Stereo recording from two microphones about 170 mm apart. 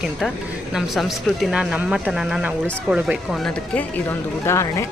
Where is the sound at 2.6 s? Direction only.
10° left (ahead or behind).